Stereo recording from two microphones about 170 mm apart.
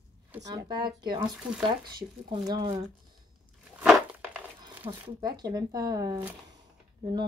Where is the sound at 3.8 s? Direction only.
Centre (ahead or behind).